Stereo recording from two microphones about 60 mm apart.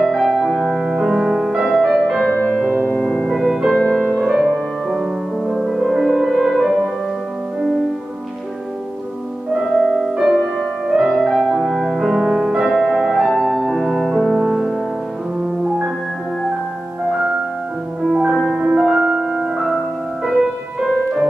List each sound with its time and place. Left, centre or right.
0.0 s music: centre
2.3 s music: left
3.0 s music: centre
9.7 s music: centre
18.1 s music: centre
20.8 s music: centre